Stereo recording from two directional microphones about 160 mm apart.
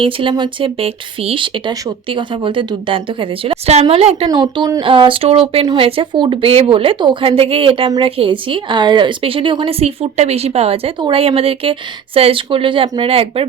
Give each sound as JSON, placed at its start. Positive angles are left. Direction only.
{"t": 0.0, "sound": "a woman's voice", "side_deg": -30}
{"t": 4.3, "sound": "a woman's voice", "side_deg": -25}